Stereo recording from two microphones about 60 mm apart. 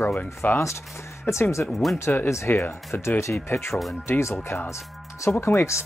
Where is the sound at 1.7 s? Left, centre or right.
Centre.